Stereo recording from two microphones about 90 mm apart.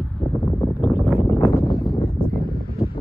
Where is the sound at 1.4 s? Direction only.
35° left (ahead or behind).